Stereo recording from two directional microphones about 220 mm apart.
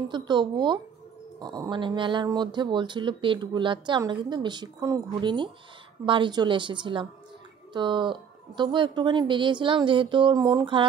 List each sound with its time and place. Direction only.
0.1 s speech: 20° right (ahead or behind)